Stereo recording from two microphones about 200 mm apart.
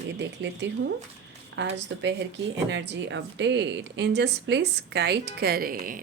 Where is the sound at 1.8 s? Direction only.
60° right (ahead or behind).